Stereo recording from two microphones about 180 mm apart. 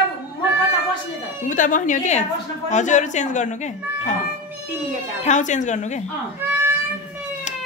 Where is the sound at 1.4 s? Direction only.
45° left (ahead or behind).